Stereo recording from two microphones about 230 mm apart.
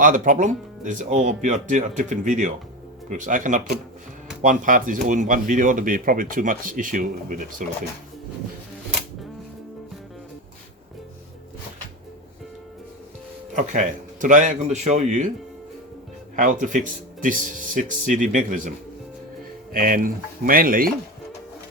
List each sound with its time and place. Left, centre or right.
0.0 s speech: right
13.5 s speech: right
16.3 s speech: right
19.7 s speech: right